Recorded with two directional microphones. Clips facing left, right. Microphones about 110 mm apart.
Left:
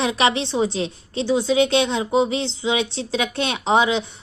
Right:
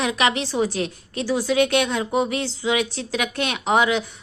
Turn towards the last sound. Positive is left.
turn(degrees=25)  # may be behind; listen again after turning